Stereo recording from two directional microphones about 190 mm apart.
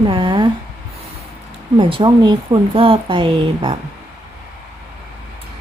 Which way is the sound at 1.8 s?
25° right (ahead or behind).